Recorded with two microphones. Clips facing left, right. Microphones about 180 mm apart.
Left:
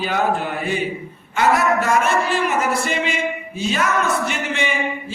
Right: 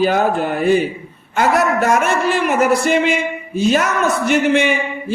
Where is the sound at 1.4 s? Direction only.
60° right (ahead or behind).